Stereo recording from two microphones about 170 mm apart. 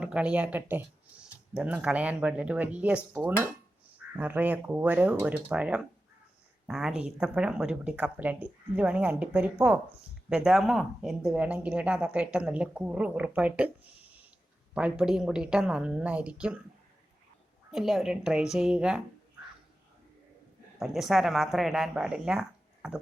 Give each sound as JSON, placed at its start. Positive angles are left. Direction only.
{"t": 0.0, "sound": "speech", "side_deg": -5}
{"t": 14.8, "sound": "speech", "side_deg": -5}
{"t": 17.7, "sound": "speech", "side_deg": 0}
{"t": 20.7, "sound": "speech", "side_deg": 0}